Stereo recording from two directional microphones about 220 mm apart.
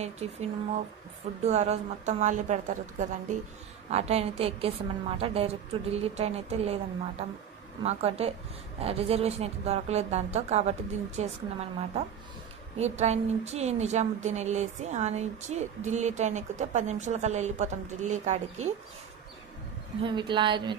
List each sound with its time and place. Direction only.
0.0 s a woman's voice: 30° right (ahead or behind)
20.0 s a woman's voice: 20° right (ahead or behind)